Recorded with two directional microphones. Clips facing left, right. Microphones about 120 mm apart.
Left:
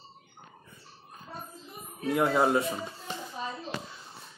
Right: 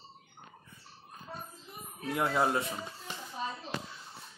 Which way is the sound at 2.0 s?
20° left (ahead or behind).